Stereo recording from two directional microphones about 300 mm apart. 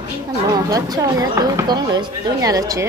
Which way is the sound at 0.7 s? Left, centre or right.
Centre.